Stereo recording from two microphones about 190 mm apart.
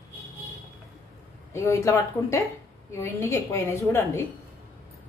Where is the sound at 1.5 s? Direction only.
15° left (ahead or behind).